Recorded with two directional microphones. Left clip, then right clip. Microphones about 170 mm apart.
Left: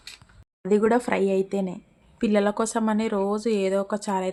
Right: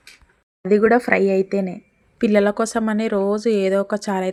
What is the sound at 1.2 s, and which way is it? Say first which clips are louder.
Speech: right 5 dB; 5° left (ahead or behind).